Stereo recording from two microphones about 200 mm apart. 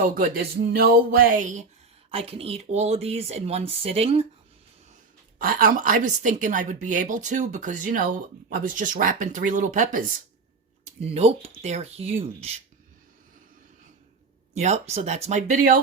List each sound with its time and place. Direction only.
0.7 s speech: 50° right (ahead or behind)
2.0 s a woman's voice: 30° right (ahead or behind)
5.4 s a woman's voice: 45° right (ahead or behind)
14.6 s a woman's voice: 35° right (ahead or behind)